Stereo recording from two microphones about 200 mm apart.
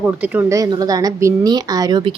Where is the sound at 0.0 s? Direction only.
10° right (ahead or behind).